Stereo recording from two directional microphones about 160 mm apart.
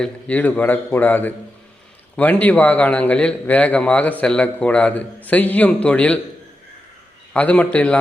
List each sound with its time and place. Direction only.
0.0 s a man's voice: 10° left (ahead or behind)
7.3 s a man's voice: 10° left (ahead or behind)